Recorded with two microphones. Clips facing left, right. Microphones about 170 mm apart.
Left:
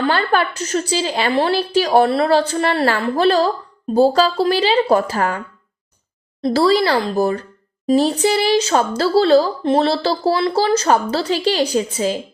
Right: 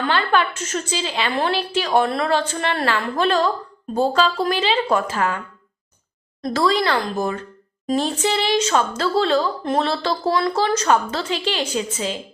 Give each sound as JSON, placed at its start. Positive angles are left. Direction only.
{"t": 0.1, "sound": "a woman's voice", "side_deg": 40}
{"t": 6.4, "sound": "a woman's voice", "side_deg": 30}